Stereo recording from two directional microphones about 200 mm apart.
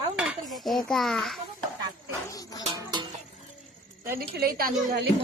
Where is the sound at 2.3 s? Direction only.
20° left (ahead or behind).